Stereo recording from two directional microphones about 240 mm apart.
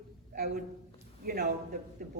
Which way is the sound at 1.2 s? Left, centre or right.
Right.